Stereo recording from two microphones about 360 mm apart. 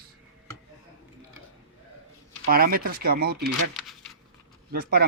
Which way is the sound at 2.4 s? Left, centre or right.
Right.